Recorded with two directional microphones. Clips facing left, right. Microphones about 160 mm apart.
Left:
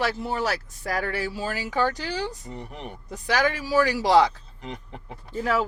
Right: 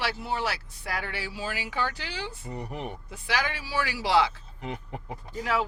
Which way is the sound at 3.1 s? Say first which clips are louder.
Left 7 dB; 40° left (ahead or behind).